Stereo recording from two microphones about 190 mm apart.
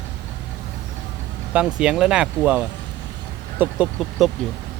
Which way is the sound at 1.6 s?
5° right (ahead or behind).